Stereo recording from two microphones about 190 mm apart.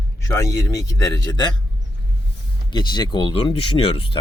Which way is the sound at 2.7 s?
20° left (ahead or behind).